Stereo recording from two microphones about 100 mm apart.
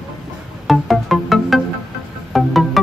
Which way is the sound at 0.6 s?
Centre (ahead or behind).